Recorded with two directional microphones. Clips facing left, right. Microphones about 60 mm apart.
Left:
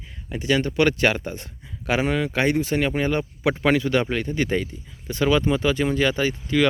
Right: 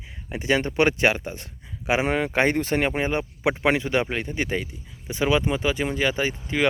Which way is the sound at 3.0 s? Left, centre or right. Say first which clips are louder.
Left 1 dB; centre.